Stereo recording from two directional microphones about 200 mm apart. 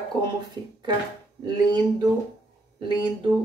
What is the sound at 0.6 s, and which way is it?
Speech, 20° right (ahead or behind).